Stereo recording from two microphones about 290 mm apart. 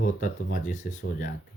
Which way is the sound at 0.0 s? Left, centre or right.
Left.